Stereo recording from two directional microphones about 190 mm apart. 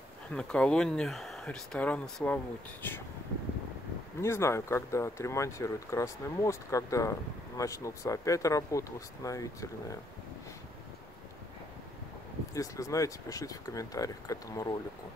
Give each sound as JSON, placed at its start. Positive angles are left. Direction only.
{"t": 0.3, "sound": "speech", "side_deg": 5}
{"t": 4.2, "sound": "speech", "side_deg": 15}
{"t": 12.5, "sound": "speech", "side_deg": 15}